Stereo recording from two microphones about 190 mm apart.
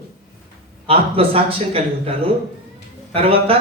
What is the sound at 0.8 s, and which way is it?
A man's voice, 30° right (ahead or behind).